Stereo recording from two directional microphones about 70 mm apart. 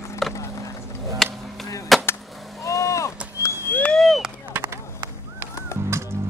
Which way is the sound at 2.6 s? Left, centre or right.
Left.